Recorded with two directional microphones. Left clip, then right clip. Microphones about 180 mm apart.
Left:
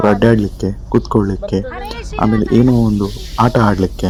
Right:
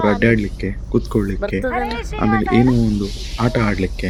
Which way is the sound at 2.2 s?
25° right (ahead or behind).